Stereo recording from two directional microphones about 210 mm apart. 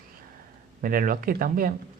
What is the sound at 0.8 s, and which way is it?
Speech, 40° right (ahead or behind).